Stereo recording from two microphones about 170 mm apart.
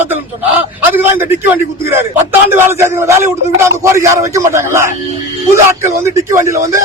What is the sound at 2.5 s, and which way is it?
Speech, 15° right (ahead or behind).